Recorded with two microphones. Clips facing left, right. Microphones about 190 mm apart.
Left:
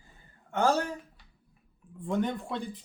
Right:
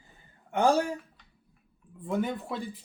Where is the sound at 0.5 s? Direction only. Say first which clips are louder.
Right 2 dB; 15° right (ahead or behind).